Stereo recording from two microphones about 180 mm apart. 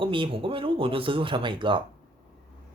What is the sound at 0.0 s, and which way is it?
Speech, 30° right (ahead or behind).